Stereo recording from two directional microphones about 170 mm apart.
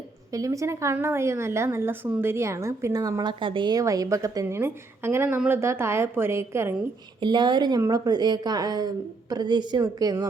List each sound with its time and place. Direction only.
0.3 s a woman's voice: 20° right (ahead or behind)
7.2 s a woman's voice: 25° right (ahead or behind)